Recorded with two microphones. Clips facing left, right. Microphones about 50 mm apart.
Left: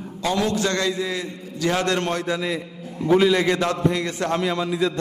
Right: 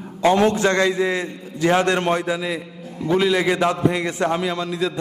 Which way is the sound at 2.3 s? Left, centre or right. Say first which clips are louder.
Right 1 dB; centre.